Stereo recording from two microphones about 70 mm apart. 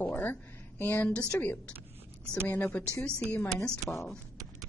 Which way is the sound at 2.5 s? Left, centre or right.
Left.